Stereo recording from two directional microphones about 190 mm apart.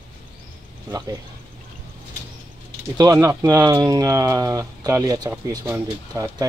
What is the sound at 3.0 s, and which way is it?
Speech, 15° right (ahead or behind).